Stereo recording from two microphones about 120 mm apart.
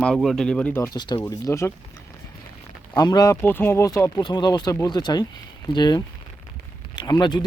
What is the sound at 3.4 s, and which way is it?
Speech, 15° left (ahead or behind).